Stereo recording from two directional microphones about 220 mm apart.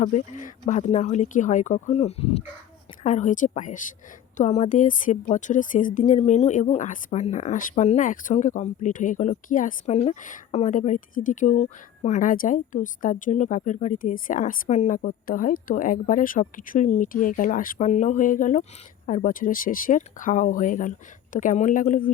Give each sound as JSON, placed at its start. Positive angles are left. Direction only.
{"t": 0.0, "sound": "a woman's voice", "side_deg": 35}